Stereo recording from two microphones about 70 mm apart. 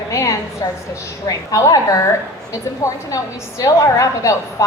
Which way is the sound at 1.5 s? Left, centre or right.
Left.